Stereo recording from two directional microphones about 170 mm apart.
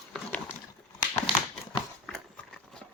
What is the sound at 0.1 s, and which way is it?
Horse, 10° left (ahead or behind).